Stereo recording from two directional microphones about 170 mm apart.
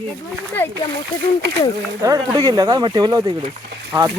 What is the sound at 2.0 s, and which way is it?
Speech, 20° right (ahead or behind).